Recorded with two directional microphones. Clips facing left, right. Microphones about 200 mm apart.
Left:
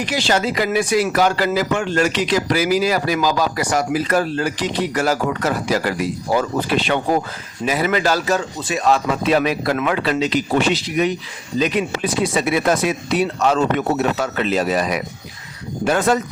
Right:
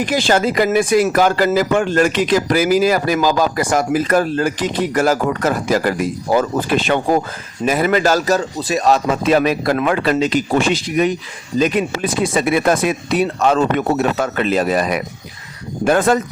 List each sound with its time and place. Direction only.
0.0 s speech: 50° right (ahead or behind)